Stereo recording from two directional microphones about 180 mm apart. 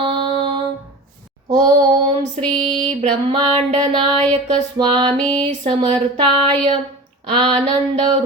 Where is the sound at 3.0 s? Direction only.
30° right (ahead or behind).